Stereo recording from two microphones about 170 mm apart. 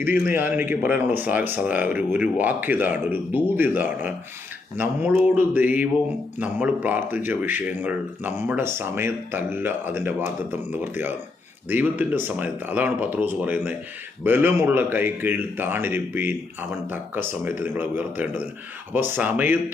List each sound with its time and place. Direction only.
0.0 s speech: 10° right (ahead or behind)